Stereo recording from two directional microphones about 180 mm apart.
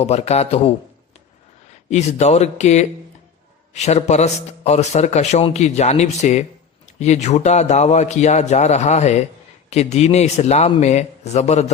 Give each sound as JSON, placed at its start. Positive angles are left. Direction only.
{"t": 0.0, "sound": "a man's voice", "side_deg": 35}
{"t": 1.9, "sound": "a man's voice", "side_deg": 40}